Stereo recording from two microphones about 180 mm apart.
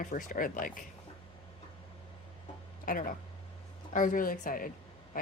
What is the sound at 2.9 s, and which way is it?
Speech, 50° left (ahead or behind).